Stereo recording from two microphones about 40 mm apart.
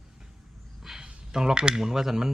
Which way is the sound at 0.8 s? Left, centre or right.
Centre.